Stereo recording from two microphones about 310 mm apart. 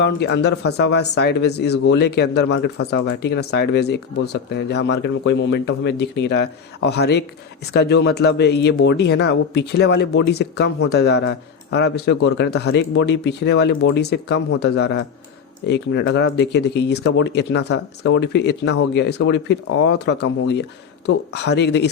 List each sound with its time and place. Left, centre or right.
0.0 s speech: left